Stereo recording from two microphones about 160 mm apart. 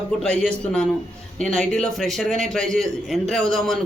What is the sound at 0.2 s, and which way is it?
A man's voice, 5° left (ahead or behind).